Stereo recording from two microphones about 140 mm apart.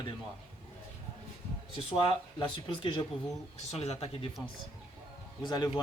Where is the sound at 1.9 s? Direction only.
40° left (ahead or behind).